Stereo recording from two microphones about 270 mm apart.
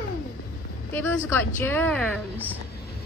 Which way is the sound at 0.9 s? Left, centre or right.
Centre.